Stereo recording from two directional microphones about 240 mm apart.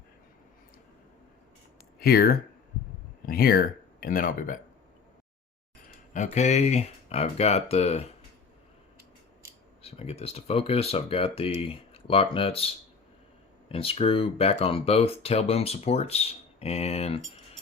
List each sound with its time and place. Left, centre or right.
2.0 s speech: left
6.1 s speech: left
9.8 s speech: left